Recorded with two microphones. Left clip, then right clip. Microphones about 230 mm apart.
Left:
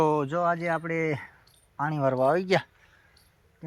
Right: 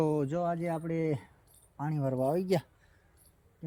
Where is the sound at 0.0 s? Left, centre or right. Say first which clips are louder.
Left 6 dB; left.